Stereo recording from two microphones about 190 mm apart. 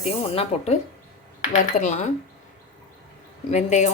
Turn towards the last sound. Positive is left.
turn(degrees=40)  # may be behind; listen again after turning